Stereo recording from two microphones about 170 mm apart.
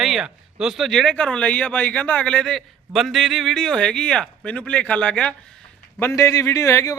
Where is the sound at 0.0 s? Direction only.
Centre (ahead or behind).